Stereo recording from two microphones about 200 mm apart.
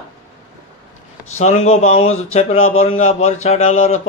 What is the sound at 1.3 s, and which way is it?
Speech, 35° left (ahead or behind).